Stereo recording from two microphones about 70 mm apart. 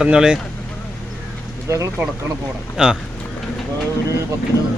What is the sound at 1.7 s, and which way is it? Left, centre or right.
Speech, right.